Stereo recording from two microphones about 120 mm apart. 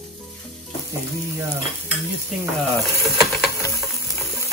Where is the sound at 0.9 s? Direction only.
25° right (ahead or behind).